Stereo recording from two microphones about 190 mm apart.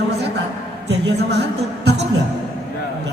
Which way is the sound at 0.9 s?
60° right (ahead or behind).